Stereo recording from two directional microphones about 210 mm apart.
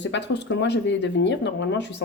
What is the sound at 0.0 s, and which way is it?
Speech, 55° left (ahead or behind).